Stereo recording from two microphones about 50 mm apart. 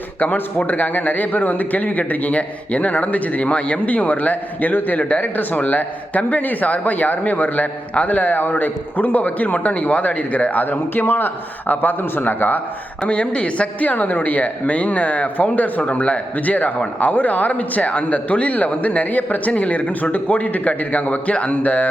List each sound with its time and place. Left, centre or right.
0.2 s a man's voice: left
13.0 s a man's voice: left